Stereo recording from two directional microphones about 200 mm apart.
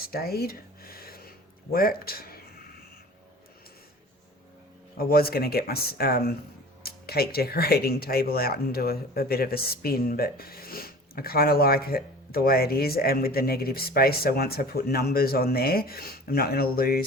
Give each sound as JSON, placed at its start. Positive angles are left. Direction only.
{"t": 0.1, "sound": "a sound", "side_deg": 50}
{"t": 1.7, "sound": "speech", "side_deg": 45}
{"t": 4.9, "sound": "speech", "side_deg": 50}